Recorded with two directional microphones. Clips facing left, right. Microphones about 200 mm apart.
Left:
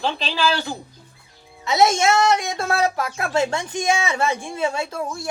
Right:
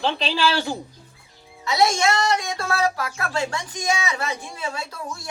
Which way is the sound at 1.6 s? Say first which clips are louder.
Left 3 dB; 25° left (ahead or behind).